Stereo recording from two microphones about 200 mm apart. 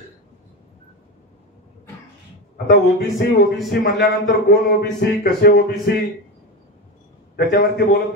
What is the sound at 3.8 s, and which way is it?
A man's voice, 50° left (ahead or behind).